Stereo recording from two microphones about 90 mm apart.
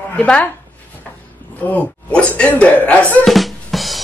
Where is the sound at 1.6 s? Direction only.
15° left (ahead or behind).